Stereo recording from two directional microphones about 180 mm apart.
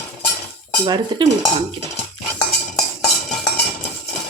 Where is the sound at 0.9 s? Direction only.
20° right (ahead or behind).